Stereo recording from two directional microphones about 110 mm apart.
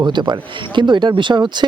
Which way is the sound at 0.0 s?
45° right (ahead or behind).